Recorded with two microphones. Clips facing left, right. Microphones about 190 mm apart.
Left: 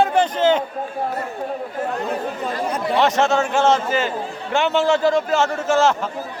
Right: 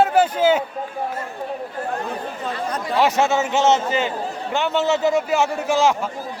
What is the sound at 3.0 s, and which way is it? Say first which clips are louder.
Speech: even; 10° right (ahead or behind).